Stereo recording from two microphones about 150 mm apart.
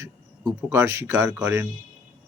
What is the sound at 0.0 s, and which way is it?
Speech, 20° right (ahead or behind).